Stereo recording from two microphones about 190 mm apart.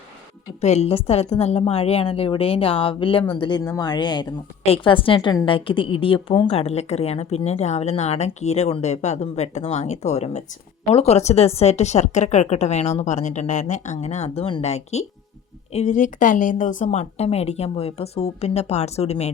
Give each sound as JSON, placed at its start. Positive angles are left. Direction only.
{"t": 0.6, "sound": "a woman's voice", "side_deg": 35}